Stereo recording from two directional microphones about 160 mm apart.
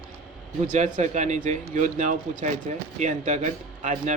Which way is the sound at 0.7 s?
50° right (ahead or behind).